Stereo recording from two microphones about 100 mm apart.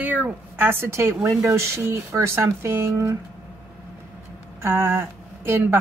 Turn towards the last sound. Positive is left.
turn(degrees=-25)  # may be behind; listen again after turning